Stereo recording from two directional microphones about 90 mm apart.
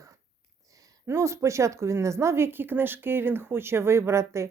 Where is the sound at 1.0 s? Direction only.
30° right (ahead or behind).